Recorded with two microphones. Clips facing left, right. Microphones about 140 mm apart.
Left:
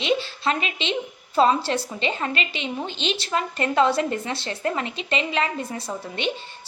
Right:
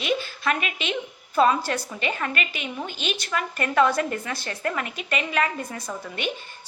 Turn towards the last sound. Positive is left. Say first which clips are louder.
# left 3 dB
turn(degrees=25)  # may be behind; listen again after turning